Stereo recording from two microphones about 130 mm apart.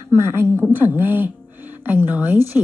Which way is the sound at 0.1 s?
20° right (ahead or behind).